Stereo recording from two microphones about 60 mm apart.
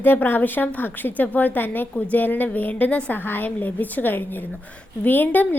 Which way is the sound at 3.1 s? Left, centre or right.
Left.